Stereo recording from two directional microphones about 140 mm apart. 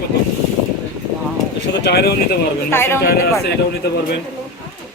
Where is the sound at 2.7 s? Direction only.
15° left (ahead or behind).